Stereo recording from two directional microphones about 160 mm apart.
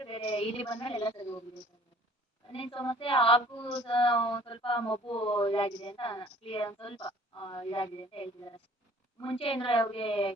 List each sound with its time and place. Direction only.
0.0 s a woman's voice: 35° left (ahead or behind)
2.5 s speech: 35° left (ahead or behind)